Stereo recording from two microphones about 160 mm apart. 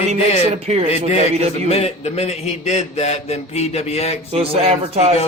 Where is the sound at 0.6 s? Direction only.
45° right (ahead or behind).